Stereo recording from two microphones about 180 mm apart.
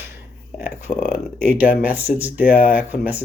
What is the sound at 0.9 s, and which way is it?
Speech, 30° left (ahead or behind).